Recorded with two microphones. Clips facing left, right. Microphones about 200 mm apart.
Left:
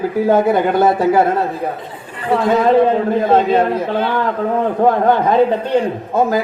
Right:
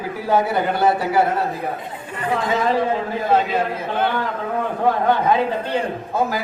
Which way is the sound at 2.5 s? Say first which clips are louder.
Left 8 dB; 55° left (ahead or behind).